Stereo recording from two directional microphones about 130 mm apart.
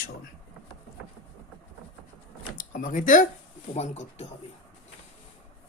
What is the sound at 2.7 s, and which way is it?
Speech, 85° left.